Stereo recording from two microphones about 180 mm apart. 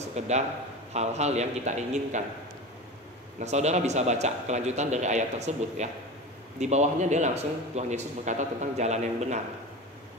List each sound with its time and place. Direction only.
0.2 s a man's voice: 40° right (ahead or behind)
3.3 s a man's voice: 40° right (ahead or behind)